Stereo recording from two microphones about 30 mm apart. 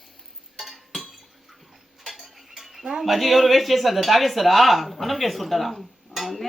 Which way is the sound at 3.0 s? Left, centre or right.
Centre.